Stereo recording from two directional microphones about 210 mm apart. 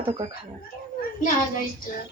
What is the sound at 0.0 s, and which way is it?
Speech, 25° right (ahead or behind).